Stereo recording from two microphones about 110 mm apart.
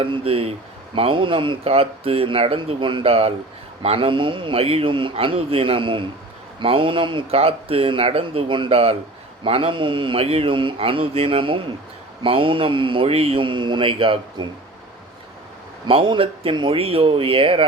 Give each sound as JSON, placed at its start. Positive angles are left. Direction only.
{"t": 0.0, "sound": "a man's voice", "side_deg": -55}
{"t": 15.9, "sound": "speech", "side_deg": -55}